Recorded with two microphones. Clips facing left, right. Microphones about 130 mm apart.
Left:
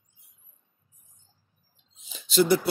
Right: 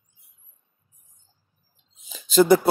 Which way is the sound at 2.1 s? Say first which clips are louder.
Right 6 dB; 45° right (ahead or behind).